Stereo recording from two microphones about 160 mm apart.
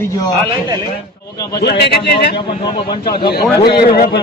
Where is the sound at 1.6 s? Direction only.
90° left.